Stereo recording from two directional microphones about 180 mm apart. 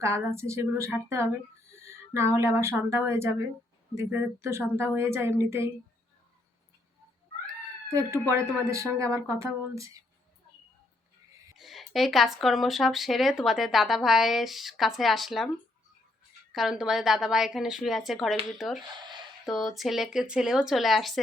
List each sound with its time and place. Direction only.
0.0 s a woman's voice: 15° right (ahead or behind)
7.9 s a woman's voice: 15° right (ahead or behind)
11.5 s speech: centre (ahead or behind)
16.5 s speech: centre (ahead or behind)